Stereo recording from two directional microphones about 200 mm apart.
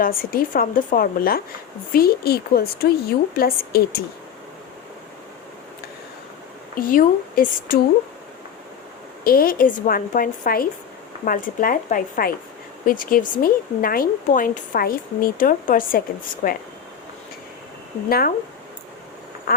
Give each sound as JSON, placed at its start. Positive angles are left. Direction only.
{"t": 0.0, "sound": "speech", "side_deg": 45}
{"t": 6.7, "sound": "speech", "side_deg": 45}
{"t": 9.2, "sound": "speech", "side_deg": 45}
{"t": 18.1, "sound": "speech", "side_deg": 50}
{"t": 19.5, "sound": "quack", "side_deg": 45}